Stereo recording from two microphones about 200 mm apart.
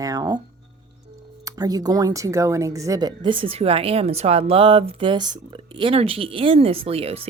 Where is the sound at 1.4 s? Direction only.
20° right (ahead or behind).